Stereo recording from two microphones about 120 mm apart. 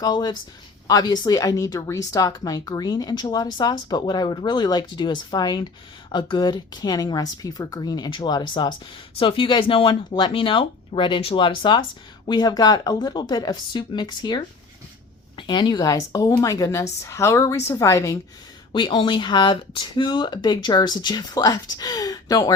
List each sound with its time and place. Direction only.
0.0 s a woman's voice: 35° left (ahead or behind)
18.7 s speech: 45° left (ahead or behind)